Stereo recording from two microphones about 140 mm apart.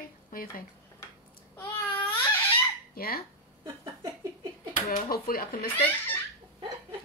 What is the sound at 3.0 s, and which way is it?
Speech, 90° left.